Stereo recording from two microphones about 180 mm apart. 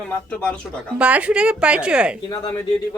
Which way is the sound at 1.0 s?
5° right (ahead or behind).